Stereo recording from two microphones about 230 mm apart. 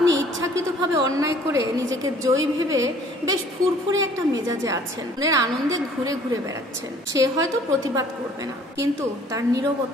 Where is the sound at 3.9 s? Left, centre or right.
Centre.